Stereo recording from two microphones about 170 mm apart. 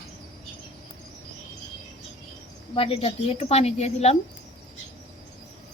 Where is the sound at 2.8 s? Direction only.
35° left (ahead or behind).